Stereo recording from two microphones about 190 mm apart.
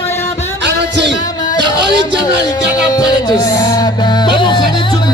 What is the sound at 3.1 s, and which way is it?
Music, 20° left (ahead or behind).